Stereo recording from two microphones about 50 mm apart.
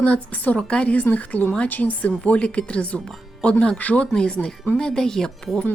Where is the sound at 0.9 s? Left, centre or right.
Left.